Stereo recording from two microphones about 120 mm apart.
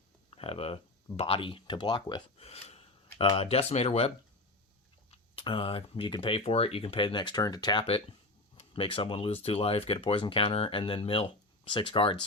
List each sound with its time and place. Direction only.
0.3 s speech: 55° left (ahead or behind)
2.4 s speech: 60° left (ahead or behind)
5.1 s speech: 50° left (ahead or behind)
7.9 s speech: 55° left (ahead or behind)